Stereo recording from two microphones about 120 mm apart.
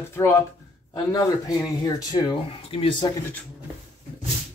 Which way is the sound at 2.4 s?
50° left (ahead or behind).